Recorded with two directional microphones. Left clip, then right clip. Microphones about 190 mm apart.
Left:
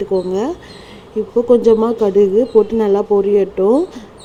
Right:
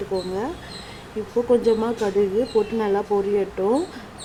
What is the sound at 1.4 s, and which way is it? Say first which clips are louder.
Speech: left 8 dB; 25° left (ahead or behind).